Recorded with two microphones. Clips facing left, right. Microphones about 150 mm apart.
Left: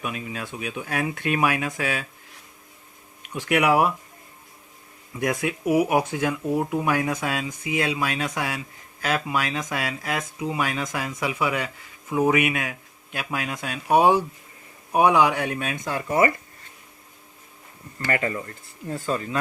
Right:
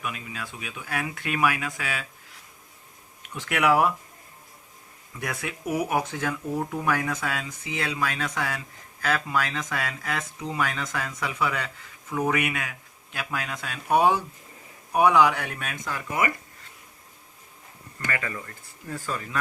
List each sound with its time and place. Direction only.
0.0 s speech: 25° left (ahead or behind)
3.2 s speech: 15° left (ahead or behind)
5.2 s speech: 20° left (ahead or behind)
18.1 s speech: 30° left (ahead or behind)